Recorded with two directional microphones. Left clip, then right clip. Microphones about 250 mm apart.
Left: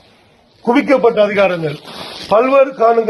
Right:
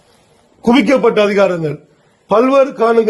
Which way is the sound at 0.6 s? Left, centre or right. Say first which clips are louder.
Even; right.